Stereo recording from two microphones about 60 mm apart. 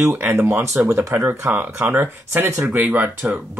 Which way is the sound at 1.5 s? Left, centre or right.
Right.